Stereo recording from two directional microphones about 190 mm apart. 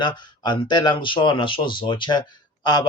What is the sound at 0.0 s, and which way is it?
Speech, 25° left (ahead or behind).